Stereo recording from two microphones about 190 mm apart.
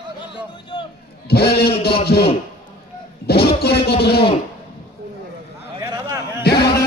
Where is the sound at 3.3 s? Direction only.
55° left (ahead or behind).